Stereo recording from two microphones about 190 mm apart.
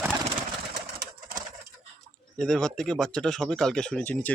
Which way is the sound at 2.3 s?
5° left (ahead or behind).